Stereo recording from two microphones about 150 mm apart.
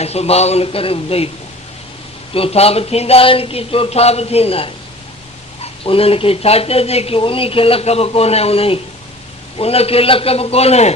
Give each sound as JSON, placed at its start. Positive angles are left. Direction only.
{"t": 0.0, "sound": "speech", "side_deg": 45}
{"t": 2.3, "sound": "speech", "side_deg": 40}